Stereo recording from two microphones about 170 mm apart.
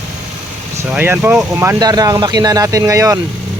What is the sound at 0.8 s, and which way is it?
Speech, 10° right (ahead or behind).